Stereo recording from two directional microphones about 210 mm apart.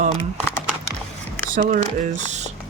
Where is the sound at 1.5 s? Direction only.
35° right (ahead or behind).